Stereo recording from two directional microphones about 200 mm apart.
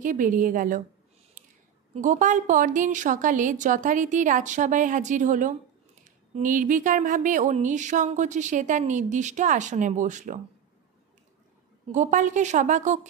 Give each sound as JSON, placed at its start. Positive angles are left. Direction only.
{"t": 0.0, "sound": "speech", "side_deg": -40}
{"t": 1.4, "sound": "a sound", "side_deg": -40}
{"t": 2.0, "sound": "speech", "side_deg": -40}
{"t": 11.9, "sound": "speech", "side_deg": -40}